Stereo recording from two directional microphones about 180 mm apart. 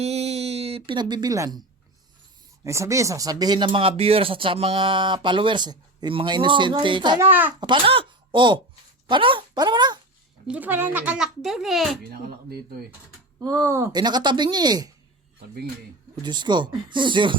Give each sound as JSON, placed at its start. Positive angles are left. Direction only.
{"t": 0.0, "sound": "a sound", "side_deg": -35}
{"t": 2.6, "sound": "speech", "side_deg": -15}
{"t": 7.2, "sound": "a child's voice", "side_deg": -10}
{"t": 7.6, "sound": "speech", "side_deg": -25}
{"t": 10.4, "sound": "a child's voice", "side_deg": -10}
{"t": 13.4, "sound": "speech", "side_deg": -20}
{"t": 16.2, "sound": "speech", "side_deg": -25}